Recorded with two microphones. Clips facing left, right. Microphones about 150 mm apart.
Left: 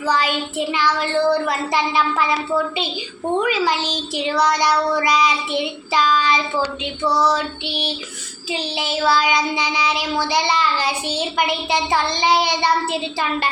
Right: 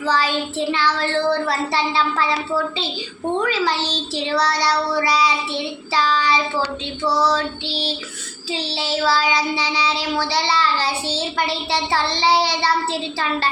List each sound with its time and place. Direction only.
0.0 s child singing: 15° left (ahead or behind)
3.4 s child singing: 15° left (ahead or behind)